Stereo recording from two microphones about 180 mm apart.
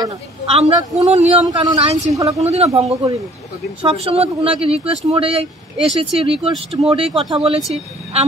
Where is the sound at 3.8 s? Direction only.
35° right (ahead or behind).